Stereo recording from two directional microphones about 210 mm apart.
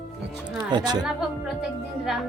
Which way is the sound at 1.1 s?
Centre (ahead or behind).